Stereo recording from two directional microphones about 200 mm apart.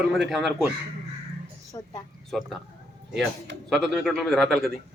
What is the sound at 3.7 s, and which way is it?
A man's voice, 5° left (ahead or behind).